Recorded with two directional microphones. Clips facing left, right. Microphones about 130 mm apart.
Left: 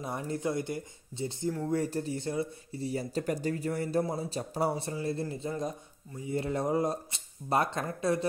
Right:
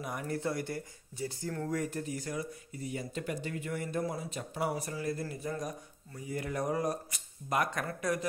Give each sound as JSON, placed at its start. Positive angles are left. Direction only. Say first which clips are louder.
{"t": 0.0, "sound": "speech", "louder": "left 2 dB", "side_deg": 25}